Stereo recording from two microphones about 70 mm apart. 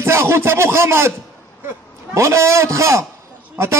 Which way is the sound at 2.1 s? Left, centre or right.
Right.